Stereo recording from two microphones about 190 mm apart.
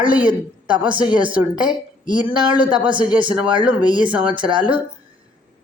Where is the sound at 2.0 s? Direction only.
25° right (ahead or behind).